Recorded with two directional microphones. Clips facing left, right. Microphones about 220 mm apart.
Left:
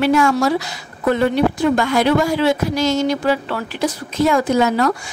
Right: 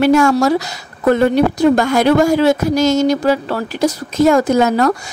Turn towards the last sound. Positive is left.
turn(degrees=-45)  # may be behind; listen again after turning